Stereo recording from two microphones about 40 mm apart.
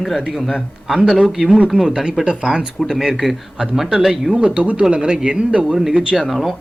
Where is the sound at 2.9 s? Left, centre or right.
Centre.